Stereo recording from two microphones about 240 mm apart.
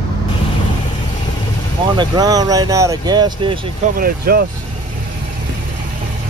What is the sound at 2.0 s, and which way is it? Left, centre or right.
Speech, centre.